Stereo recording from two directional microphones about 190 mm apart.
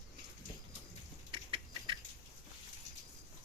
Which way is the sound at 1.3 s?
25° right (ahead or behind).